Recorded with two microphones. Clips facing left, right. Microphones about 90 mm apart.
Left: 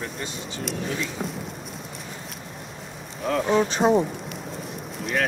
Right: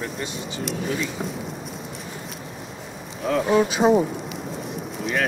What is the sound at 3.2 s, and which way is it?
Speech, 5° right (ahead or behind).